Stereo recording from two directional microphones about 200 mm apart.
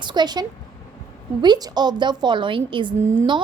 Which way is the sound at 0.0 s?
20° right (ahead or behind).